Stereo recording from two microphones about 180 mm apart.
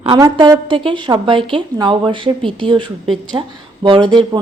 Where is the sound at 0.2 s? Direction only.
20° right (ahead or behind).